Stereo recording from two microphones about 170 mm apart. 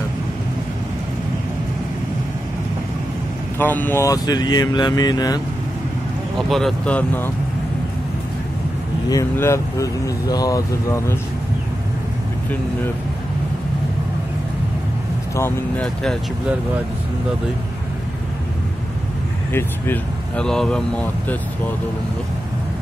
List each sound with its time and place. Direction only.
3.5 s speech: 10° left (ahead or behind)
6.5 s speech: 5° left (ahead or behind)
9.1 s speech: 15° left (ahead or behind)
15.3 s speech: 15° left (ahead or behind)
15.8 s speech: 5° left (ahead or behind)
19.5 s speech: 10° left (ahead or behind)